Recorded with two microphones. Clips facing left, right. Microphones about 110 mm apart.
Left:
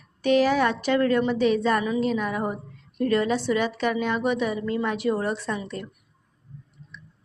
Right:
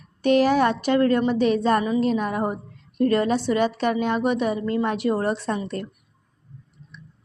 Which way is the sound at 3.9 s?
25° right (ahead or behind).